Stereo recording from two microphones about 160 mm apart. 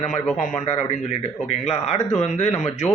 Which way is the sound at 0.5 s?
45° left (ahead or behind).